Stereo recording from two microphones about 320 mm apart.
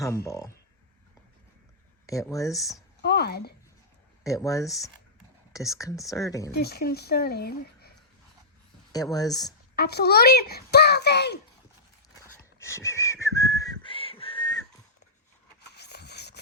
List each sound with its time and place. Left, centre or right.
0.3 s speech: centre
2.0 s speech: centre
2.6 s speech: centre
3.0 s speech: left
4.2 s speech: centre
5.7 s speech: centre
6.5 s speech: left
8.9 s speech: centre
9.7 s a child's voice: left
12.2 s whistling: centre
15.7 s a sound: left